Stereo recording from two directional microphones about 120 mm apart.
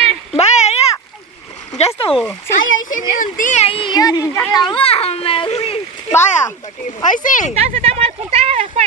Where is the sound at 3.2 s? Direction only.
85° left.